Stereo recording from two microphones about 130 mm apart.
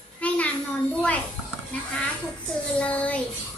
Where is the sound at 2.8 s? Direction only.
10° left (ahead or behind).